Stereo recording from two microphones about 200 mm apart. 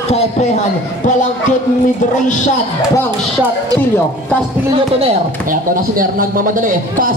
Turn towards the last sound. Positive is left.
turn(degrees=-40)  # may be behind; listen again after turning